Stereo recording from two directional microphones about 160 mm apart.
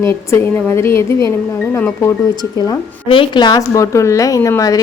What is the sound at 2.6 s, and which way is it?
A woman's voice, 30° left (ahead or behind).